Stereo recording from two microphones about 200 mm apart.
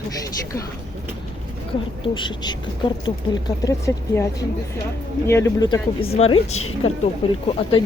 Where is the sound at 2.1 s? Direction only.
20° left (ahead or behind).